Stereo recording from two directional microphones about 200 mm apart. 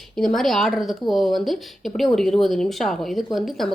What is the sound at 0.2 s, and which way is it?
A woman's voice, centre (ahead or behind).